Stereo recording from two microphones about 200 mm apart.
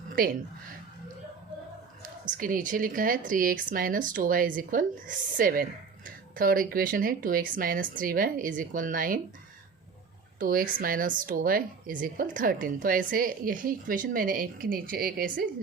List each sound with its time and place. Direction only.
2.4 s a woman's voice: 45° right (ahead or behind)
10.4 s a woman's voice: 45° right (ahead or behind)